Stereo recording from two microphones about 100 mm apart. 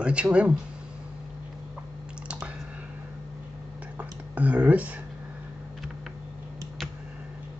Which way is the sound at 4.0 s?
15° right (ahead or behind).